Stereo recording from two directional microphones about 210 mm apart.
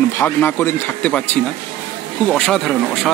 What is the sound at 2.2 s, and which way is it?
Speech, 5° left (ahead or behind).